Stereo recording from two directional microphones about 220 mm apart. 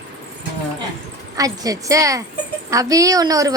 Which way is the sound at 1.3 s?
15° right (ahead or behind).